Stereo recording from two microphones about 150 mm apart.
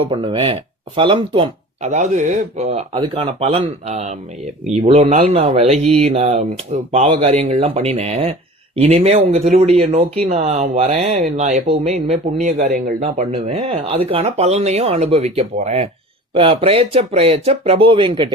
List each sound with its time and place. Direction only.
0.0 s speech: 35° right (ahead or behind)
1.8 s speech: 50° right (ahead or behind)
2.9 s speech: 40° right (ahead or behind); by 12.8 s 60° right (ahead or behind)
13.0 s speech: 45° right (ahead or behind)